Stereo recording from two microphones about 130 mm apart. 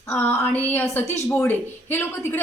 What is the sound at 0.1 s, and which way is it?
A woman's voice, 15° left (ahead or behind).